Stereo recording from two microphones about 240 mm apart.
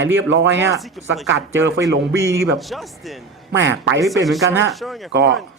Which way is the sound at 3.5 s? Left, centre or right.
Right.